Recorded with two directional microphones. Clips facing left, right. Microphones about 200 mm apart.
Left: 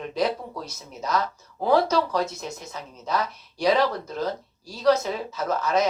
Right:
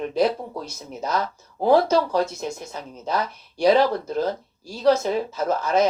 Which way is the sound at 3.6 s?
30° right (ahead or behind).